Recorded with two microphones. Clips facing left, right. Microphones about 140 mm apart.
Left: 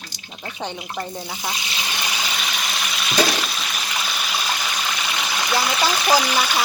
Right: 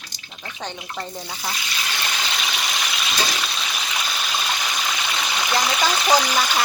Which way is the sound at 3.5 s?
Centre (ahead or behind).